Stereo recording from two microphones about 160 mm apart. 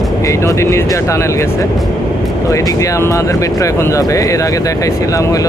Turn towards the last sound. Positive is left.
turn(degrees=20)  # may be behind; listen again after turning